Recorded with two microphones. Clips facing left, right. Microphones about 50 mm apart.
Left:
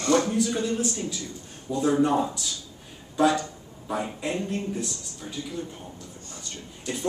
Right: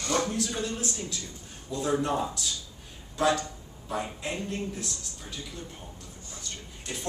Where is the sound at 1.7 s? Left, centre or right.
Left.